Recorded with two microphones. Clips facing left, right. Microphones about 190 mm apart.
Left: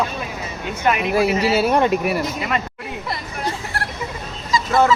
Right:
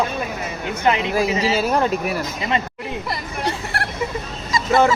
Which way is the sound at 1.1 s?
10° left (ahead or behind).